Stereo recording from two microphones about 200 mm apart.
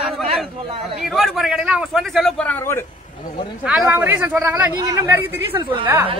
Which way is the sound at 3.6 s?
10° right (ahead or behind).